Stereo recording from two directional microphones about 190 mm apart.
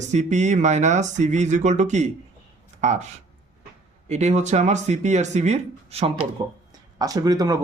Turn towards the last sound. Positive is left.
turn(degrees=-20)  # may be behind; listen again after turning